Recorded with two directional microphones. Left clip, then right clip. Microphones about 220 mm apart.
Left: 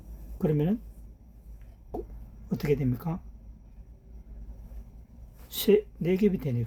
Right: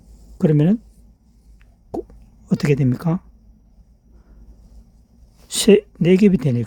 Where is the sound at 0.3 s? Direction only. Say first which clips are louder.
Right 10 dB; 50° right (ahead or behind).